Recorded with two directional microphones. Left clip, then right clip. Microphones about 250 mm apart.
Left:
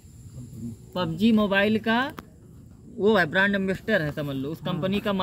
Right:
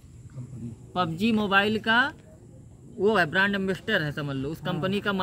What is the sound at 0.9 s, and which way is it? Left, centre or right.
Speech, centre.